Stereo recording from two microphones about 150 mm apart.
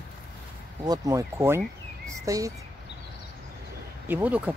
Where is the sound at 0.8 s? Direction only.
25° right (ahead or behind).